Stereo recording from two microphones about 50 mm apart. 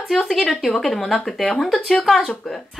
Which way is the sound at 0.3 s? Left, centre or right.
Centre.